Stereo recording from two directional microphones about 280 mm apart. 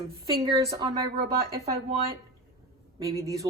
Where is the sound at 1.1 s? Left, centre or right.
Right.